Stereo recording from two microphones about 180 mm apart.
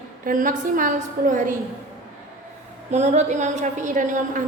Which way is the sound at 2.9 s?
40° right (ahead or behind).